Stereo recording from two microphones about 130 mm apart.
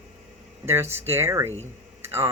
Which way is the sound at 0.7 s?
20° right (ahead or behind).